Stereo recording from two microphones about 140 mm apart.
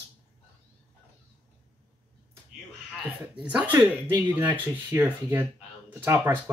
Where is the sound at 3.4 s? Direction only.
10° right (ahead or behind).